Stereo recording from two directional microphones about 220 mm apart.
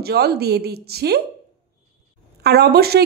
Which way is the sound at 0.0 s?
45° right (ahead or behind).